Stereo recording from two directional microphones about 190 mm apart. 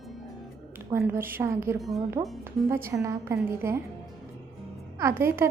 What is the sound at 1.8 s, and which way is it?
Speech, centre (ahead or behind).